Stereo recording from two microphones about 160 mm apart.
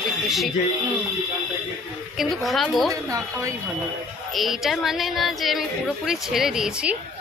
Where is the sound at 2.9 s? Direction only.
20° right (ahead or behind).